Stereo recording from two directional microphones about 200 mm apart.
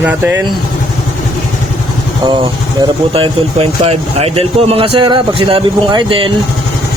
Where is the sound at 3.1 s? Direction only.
30° right (ahead or behind).